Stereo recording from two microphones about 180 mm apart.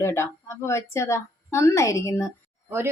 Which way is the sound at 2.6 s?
15° right (ahead or behind).